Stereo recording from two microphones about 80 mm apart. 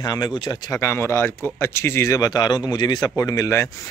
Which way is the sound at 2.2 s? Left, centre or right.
Left.